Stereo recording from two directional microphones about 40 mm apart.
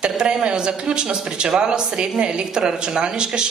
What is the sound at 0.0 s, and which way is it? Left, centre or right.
Speech, centre.